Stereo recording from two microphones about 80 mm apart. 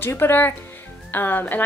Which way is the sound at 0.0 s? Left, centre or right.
Left.